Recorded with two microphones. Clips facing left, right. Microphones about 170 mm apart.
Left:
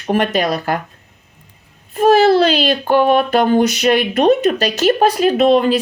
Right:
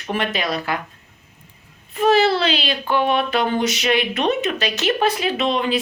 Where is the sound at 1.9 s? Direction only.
40° left (ahead or behind).